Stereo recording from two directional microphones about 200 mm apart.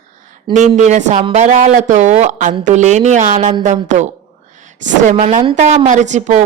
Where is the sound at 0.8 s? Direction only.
35° right (ahead or behind).